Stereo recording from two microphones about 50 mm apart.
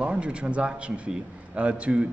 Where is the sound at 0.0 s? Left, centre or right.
Right.